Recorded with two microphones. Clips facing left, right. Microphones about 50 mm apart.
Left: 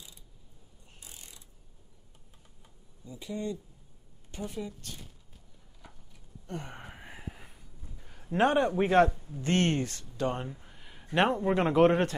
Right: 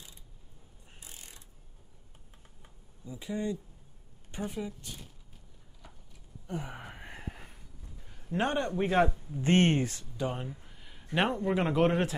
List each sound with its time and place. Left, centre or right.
1.0 s mechanisms: right
3.1 s speech: centre
6.4 s a sound: centre
8.3 s speech: centre
8.9 s speech: centre
9.4 s speech: right; by 10.6 s centre
10.6 s a sound: centre
11.1 s speech: centre